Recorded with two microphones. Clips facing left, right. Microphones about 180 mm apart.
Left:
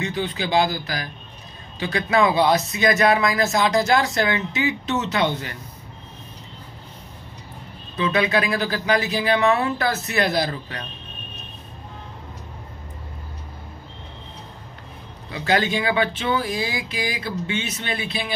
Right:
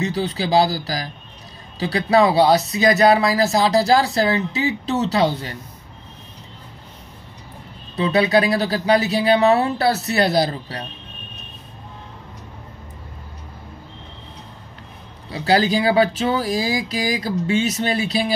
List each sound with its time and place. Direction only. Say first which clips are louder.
0.0 s speech: right 3 dB; 35° right (ahead or behind)
8.0 s speech: right 4 dB; 35° right (ahead or behind)
15.2 s speech: right 4 dB; 35° right (ahead or behind)